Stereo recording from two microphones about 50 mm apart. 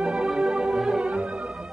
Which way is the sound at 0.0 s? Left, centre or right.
Centre.